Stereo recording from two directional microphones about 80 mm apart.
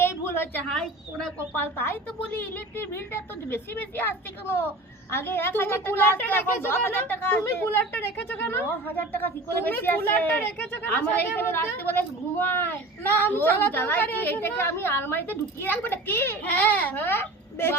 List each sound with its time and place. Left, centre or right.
0.0 s a sound: left
0.7 s a woman's voice: centre
1.5 s a woman's voice: left